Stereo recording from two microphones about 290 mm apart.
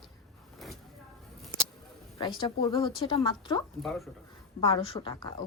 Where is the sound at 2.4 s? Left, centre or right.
Centre.